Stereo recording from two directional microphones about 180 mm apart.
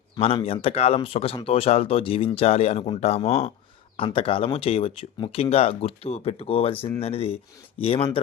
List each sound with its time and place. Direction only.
0.2 s speech: 35° left (ahead or behind)